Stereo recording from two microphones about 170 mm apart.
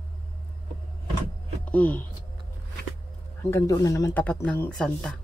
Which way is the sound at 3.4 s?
15° left (ahead or behind).